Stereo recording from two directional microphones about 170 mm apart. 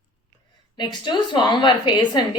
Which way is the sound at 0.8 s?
25° left (ahead or behind).